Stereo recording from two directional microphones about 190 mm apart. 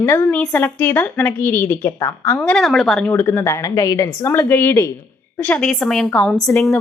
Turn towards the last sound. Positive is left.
turn(degrees=0)  # may be behind; listen again after turning